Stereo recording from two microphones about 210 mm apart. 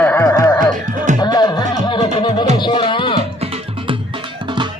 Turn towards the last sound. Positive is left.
turn(degrees=20)  # may be behind; listen again after turning